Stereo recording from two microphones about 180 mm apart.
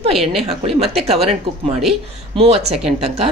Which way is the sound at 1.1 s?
35° right (ahead or behind).